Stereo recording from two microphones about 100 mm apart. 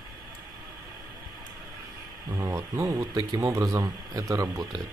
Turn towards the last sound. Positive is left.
turn(degrees=-40)  # may be behind; listen again after turning